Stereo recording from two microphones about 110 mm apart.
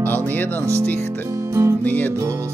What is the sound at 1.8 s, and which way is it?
Music, 15° left (ahead or behind).